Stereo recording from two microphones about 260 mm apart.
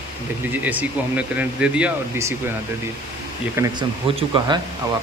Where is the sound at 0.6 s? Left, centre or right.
Centre.